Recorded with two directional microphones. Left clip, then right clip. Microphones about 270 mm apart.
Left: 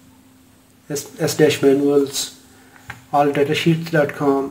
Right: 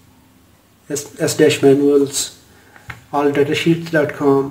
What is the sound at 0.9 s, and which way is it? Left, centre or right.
Speech, centre.